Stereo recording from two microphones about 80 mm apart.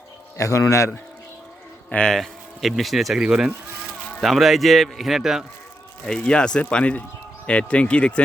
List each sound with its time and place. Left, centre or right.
0.3 s a man's voice: left
1.9 s livestock: centre
2.1 s a man's voice: centre
6.1 s speech: centre